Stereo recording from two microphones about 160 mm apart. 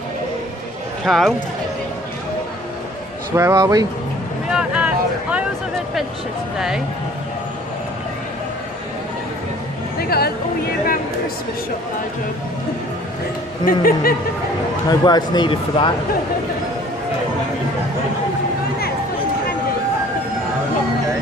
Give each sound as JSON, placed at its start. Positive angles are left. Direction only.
{"t": 1.0, "sound": "speech", "side_deg": 0}
{"t": 3.3, "sound": "speech", "side_deg": -20}
{"t": 4.5, "sound": "a sound", "side_deg": -5}
{"t": 9.9, "sound": "speech", "side_deg": 75}
{"t": 13.7, "sound": "speech", "side_deg": 65}
{"t": 14.9, "sound": "speech", "side_deg": 25}